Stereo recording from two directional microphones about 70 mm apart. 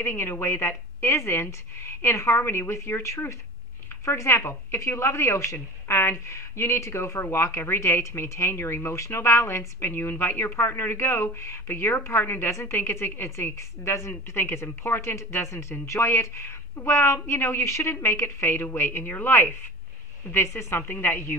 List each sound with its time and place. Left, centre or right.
0.0 s speech: left